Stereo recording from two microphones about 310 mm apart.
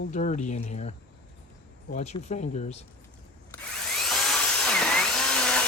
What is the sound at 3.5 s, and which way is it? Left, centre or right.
Tools, centre.